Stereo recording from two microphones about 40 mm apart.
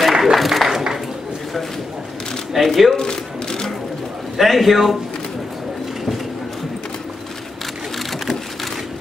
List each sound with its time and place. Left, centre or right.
0.1 s a sound: centre
2.5 s speech: centre
3.0 s shuffling cards: centre
4.4 s a man's voice: centre